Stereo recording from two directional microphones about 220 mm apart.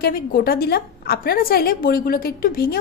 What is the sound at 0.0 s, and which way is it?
A woman's voice, 40° left (ahead or behind).